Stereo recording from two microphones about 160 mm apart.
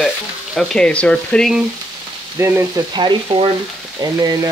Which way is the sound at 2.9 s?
30° right (ahead or behind).